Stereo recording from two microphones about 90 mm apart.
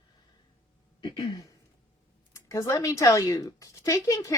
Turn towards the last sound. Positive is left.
turn(degrees=35)  # may be behind; listen again after turning